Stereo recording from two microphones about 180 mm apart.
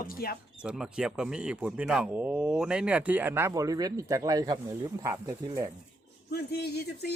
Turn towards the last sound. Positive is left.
turn(degrees=65)  # may be behind; listen again after turning